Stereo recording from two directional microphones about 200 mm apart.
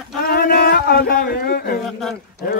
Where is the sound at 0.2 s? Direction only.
50° left (ahead or behind).